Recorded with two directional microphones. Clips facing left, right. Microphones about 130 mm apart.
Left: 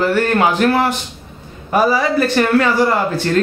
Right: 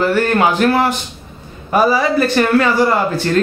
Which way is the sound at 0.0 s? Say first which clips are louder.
Right 1 dB; 20° right (ahead or behind).